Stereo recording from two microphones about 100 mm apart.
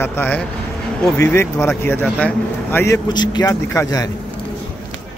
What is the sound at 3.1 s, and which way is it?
Speech, 45° left (ahead or behind).